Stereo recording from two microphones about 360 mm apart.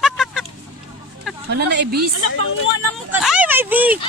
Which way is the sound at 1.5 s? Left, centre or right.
Right.